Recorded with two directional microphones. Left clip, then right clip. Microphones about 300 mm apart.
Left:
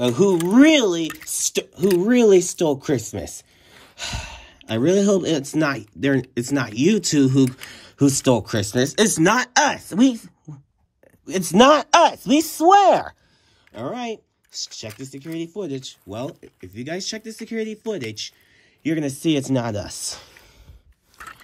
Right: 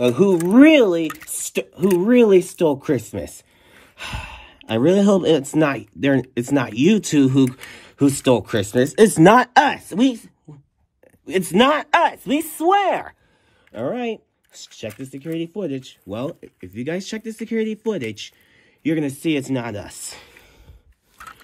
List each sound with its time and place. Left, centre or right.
0.0 s speech: centre
8.7 s speech: left
9.2 s speech: centre
11.2 s speech: centre
13.7 s speech: centre